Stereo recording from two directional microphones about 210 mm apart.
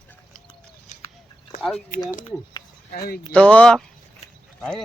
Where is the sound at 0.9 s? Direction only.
35° left (ahead or behind).